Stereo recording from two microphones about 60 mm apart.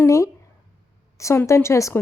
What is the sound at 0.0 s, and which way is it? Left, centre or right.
Speech, left.